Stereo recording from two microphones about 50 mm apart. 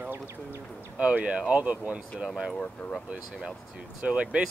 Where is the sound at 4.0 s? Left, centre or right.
Right.